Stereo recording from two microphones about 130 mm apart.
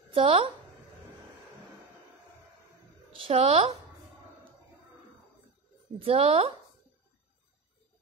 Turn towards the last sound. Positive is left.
turn(degrees=-50)  # may be behind; listen again after turning